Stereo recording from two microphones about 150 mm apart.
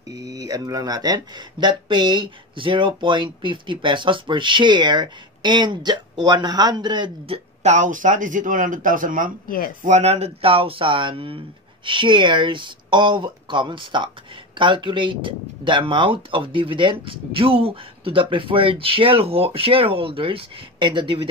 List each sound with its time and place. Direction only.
0.1 s speech: 25° right (ahead or behind)
7.6 s speech: 55° right (ahead or behind)
9.8 s speech: 50° right (ahead or behind); by 21.2 s 30° right (ahead or behind)